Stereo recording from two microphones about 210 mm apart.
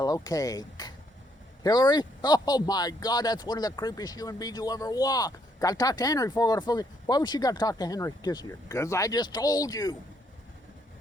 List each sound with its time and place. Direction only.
0.0 s speech: 15° left (ahead or behind)